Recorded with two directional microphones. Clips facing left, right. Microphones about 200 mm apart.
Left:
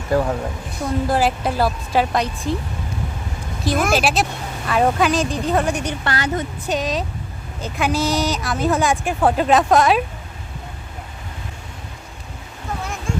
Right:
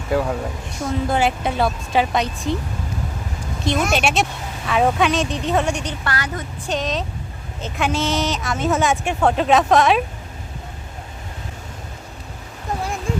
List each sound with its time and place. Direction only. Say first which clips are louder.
0.1 s speech: left 1 dB; centre (ahead or behind)
3.6 s speech: left 1 dB; centre (ahead or behind)
6.1 s a woman's voice: left 4 dB; 25° left (ahead or behind)
6.7 s speech: even; 5° left (ahead or behind)
12.8 s a sound: right 3 dB; 35° right (ahead or behind)